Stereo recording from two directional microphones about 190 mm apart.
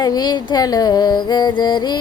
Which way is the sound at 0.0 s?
20° left (ahead or behind).